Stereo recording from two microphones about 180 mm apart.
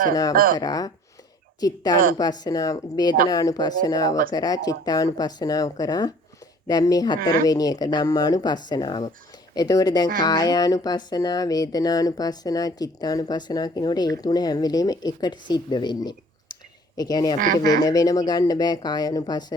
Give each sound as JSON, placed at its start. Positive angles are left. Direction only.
{"t": 0.5, "sound": "speech", "side_deg": 20}